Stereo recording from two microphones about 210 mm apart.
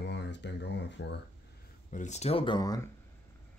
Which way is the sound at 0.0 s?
55° left (ahead or behind).